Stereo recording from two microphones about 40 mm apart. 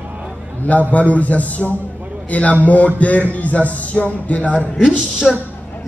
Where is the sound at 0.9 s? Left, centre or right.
Left.